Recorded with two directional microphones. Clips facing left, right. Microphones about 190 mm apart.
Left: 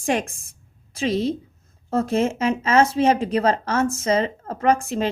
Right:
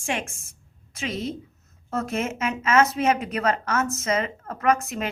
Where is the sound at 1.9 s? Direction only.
30° left (ahead or behind).